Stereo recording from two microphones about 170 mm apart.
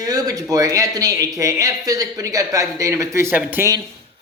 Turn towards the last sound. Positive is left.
turn(degrees=-15)  # may be behind; listen again after turning